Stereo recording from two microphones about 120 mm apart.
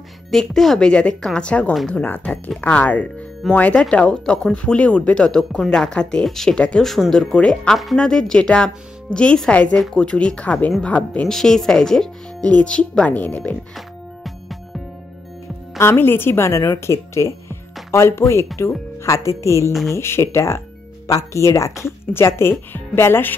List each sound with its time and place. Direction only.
0.3 s speech: 5° left (ahead or behind)
13.7 s music: centre (ahead or behind)
15.8 s a woman's voice: 20° left (ahead or behind)